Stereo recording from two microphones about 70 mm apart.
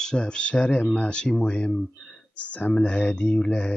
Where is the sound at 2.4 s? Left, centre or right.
Left.